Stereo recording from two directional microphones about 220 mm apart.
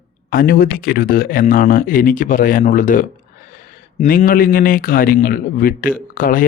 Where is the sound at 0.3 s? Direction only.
40° left (ahead or behind).